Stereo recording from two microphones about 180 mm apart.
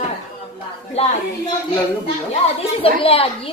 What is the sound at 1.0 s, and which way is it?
Speech, 35° left (ahead or behind).